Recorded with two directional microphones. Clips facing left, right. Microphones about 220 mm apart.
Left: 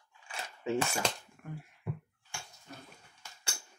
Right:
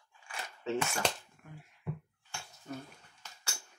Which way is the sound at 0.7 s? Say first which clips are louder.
Left 2 dB; 10° left (ahead or behind).